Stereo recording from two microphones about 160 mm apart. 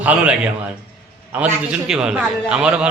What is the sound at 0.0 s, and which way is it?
Speech, 10° right (ahead or behind).